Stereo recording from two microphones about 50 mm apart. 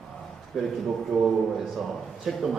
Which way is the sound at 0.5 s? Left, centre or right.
Centre.